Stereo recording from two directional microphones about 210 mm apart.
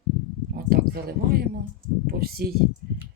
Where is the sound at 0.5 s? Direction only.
45° right (ahead or behind).